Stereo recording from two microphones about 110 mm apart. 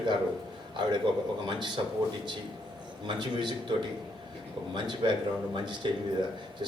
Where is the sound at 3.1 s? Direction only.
45° right (ahead or behind).